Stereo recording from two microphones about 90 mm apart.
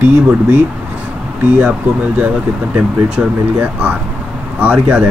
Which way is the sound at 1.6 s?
15° right (ahead or behind).